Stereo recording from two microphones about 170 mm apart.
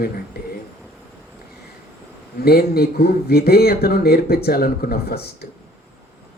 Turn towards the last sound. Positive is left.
turn(degrees=65)  # may be behind; listen again after turning